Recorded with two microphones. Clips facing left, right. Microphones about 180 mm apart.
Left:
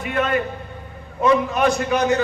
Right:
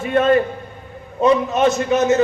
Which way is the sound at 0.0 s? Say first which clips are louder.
Right 6 dB; 30° right (ahead or behind).